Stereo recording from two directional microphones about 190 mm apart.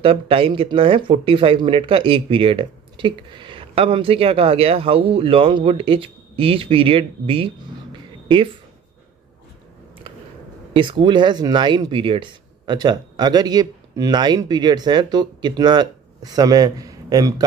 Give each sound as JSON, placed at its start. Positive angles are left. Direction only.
{"t": 0.0, "sound": "speech", "side_deg": -30}
{"t": 10.7, "sound": "speech", "side_deg": -25}